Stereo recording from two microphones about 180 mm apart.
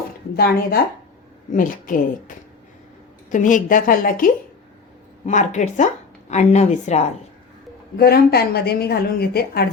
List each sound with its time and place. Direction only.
0.3 s a woman's voice: 60° left (ahead or behind)
1.5 s a woman's voice: 50° left (ahead or behind)
7.9 s a woman's voice: 60° left (ahead or behind)